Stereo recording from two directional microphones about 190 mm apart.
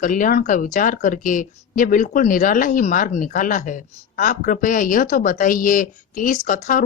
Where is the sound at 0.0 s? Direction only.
45° left (ahead or behind).